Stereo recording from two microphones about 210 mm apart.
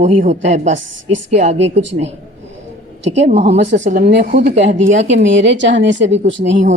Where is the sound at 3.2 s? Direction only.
30° right (ahead or behind).